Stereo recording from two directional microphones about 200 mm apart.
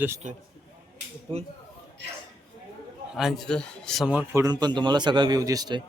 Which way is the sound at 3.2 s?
Centre (ahead or behind).